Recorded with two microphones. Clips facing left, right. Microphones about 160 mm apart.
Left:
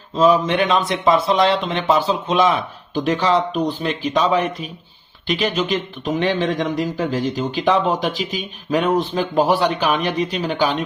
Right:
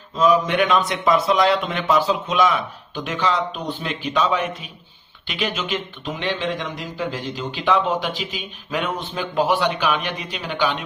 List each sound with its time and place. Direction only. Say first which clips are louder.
0.2 s a man's voice: left 2 dB; 30° left (ahead or behind)